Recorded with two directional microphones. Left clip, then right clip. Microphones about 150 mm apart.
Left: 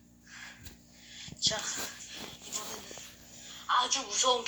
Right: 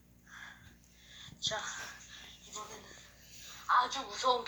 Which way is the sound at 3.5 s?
30° left (ahead or behind).